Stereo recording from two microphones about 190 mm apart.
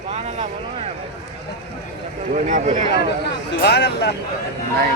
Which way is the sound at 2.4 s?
40° right (ahead or behind).